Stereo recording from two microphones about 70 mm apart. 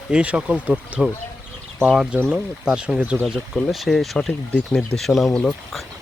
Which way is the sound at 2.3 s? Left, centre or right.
Centre.